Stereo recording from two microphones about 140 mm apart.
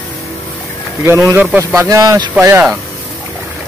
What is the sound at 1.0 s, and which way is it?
Speech, 20° right (ahead or behind).